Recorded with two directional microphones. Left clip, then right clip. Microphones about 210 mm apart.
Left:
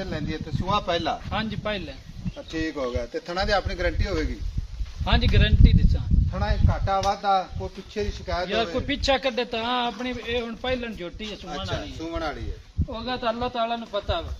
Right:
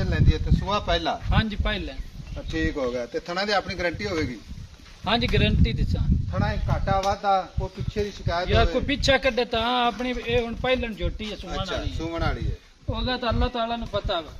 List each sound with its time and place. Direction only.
0.0 s speech: 35° right (ahead or behind)
1.3 s a man's voice: 45° right (ahead or behind)
2.5 s speech: 20° right (ahead or behind)
5.0 s a man's voice: 45° right (ahead or behind)
6.3 s speech: 5° right (ahead or behind)
8.7 s a man's voice: 50° right (ahead or behind)
11.4 s speech: 10° right (ahead or behind)
12.9 s speech: 30° right (ahead or behind)